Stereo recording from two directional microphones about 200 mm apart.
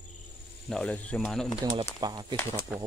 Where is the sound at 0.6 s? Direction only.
5° left (ahead or behind).